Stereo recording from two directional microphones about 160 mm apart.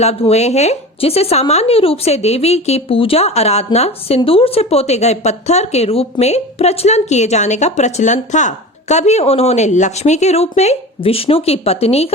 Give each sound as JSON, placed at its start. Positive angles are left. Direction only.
{"t": 0.0, "sound": "speech", "side_deg": 40}